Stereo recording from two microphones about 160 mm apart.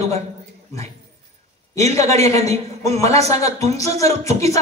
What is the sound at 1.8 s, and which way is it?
A man's voice, 40° right (ahead or behind).